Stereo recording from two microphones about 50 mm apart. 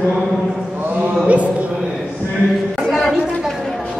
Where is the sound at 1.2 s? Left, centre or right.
Right.